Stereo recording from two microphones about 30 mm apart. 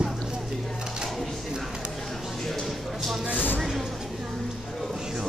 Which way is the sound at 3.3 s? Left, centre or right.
Left.